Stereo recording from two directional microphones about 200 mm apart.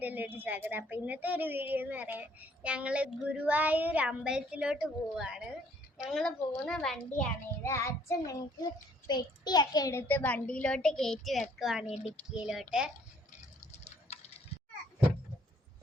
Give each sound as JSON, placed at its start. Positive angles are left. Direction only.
{"t": 0.0, "sound": "a woman's voice", "side_deg": -10}
{"t": 7.6, "sound": "child singing", "side_deg": 15}
{"t": 11.6, "sound": "a woman's voice", "side_deg": 0}
{"t": 14.1, "sound": "tick-tock", "side_deg": 35}